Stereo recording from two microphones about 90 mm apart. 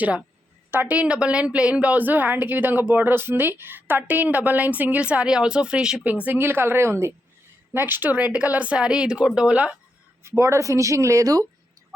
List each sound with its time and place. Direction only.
0.7 s a woman's voice: 20° right (ahead or behind)
6.2 s a woman's voice: 20° right (ahead or behind)
10.2 s speech: 35° right (ahead or behind)